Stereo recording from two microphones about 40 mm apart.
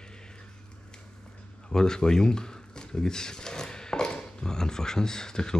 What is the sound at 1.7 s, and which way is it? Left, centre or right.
Speech, centre.